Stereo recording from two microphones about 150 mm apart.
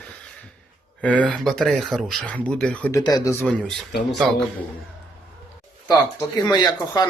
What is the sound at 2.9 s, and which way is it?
Speech, 20° left (ahead or behind).